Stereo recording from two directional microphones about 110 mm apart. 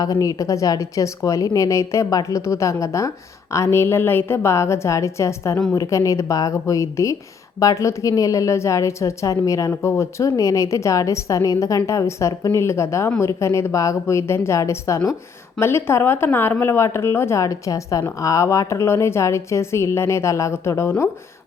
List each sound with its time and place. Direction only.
0.0 s a woman's voice: 30° left (ahead or behind)